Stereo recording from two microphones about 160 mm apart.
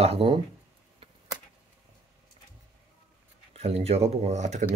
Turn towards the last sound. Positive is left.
turn(degrees=-50)  # may be behind; listen again after turning